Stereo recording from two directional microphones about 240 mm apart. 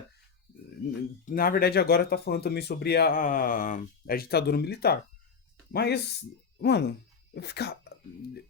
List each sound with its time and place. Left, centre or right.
1.2 s speech: left